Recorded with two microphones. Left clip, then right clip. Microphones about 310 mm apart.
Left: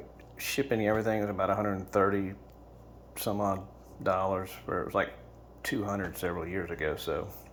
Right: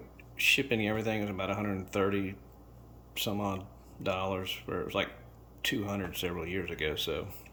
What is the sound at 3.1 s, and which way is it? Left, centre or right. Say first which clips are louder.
Speech: left 3 dB; centre.